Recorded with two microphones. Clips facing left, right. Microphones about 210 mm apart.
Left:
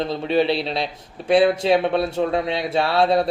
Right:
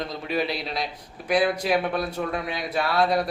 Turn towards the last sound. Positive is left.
turn(degrees=25)  # may be behind; listen again after turning